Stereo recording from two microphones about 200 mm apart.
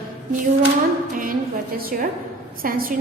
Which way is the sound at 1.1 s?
45° right (ahead or behind).